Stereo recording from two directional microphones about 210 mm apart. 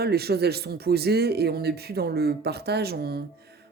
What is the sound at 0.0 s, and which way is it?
Speech, 50° right (ahead or behind).